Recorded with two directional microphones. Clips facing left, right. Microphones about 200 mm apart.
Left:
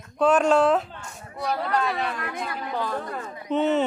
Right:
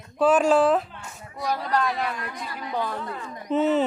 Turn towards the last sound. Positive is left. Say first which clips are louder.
# right 1 dB
turn(degrees=0)  # may be behind; listen again after turning